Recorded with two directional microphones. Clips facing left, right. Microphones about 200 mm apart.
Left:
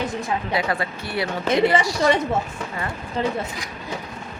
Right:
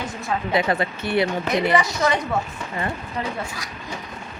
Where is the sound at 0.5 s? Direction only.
20° right (ahead or behind).